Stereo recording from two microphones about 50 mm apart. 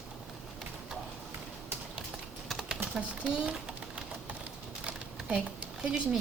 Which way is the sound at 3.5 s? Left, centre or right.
Centre.